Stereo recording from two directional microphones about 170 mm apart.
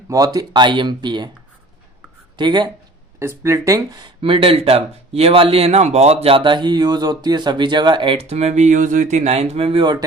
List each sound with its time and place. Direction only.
0.3 s speech: 25° right (ahead or behind)
2.3 s speech: 25° right (ahead or behind)
3.2 s speech: 15° right (ahead or behind)